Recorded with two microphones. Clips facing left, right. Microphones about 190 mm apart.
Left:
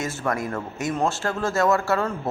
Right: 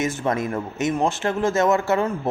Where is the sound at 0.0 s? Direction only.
20° right (ahead or behind).